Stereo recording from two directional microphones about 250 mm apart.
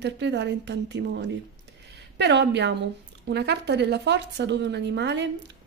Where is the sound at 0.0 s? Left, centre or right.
Right.